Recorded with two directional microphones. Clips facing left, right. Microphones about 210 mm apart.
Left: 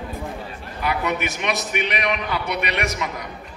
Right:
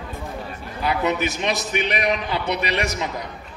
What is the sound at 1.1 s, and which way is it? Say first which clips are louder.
A man's voice: right 2 dB; 30° right (ahead or behind).